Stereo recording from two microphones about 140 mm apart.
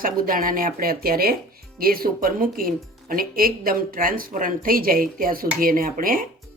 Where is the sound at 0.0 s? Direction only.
80° right.